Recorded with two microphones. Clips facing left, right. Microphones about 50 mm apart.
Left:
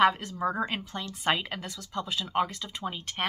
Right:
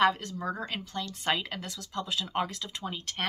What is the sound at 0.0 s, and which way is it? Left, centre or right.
Speech, centre.